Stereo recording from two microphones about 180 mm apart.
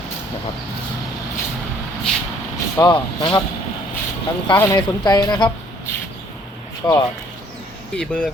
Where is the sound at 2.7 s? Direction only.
25° left (ahead or behind).